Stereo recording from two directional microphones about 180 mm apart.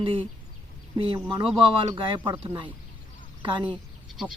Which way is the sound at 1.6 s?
25° right (ahead or behind).